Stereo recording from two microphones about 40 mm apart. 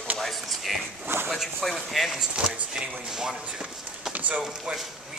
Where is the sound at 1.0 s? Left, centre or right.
Right.